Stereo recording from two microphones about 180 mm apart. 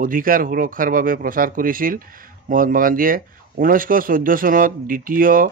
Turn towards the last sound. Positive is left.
turn(degrees=-50)  # may be behind; listen again after turning